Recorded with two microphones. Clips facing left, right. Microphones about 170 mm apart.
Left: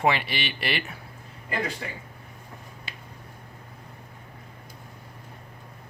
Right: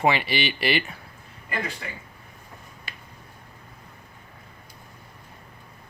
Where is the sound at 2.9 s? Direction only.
25° left (ahead or behind).